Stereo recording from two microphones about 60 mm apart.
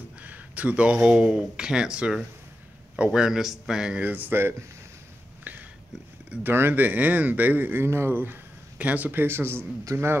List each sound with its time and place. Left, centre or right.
0.2 s speech: right
4.0 s speech: right
4.4 s speech: right
5.4 s a sound: right
6.4 s speech: right